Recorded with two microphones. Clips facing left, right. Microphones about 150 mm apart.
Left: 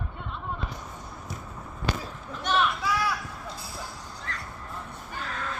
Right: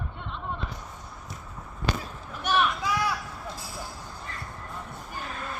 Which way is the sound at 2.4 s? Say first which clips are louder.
Even; 15° right (ahead or behind).